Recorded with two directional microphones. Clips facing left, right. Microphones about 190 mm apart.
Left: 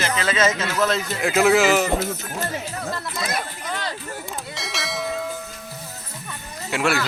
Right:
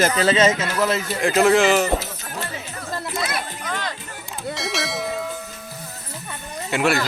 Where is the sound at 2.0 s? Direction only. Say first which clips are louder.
Left 5 dB; 50° left (ahead or behind).